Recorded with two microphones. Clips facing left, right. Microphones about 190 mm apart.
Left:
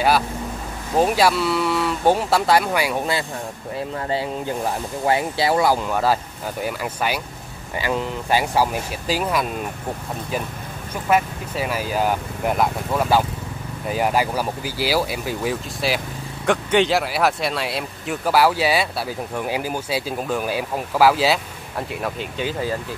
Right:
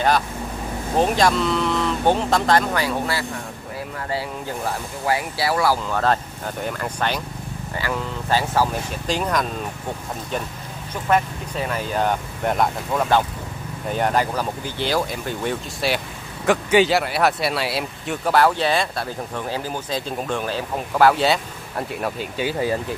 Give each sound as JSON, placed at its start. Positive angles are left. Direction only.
{"t": 0.9, "sound": "speech", "side_deg": 5}
{"t": 7.7, "sound": "speech", "side_deg": 20}
{"t": 11.1, "sound": "speech", "side_deg": 10}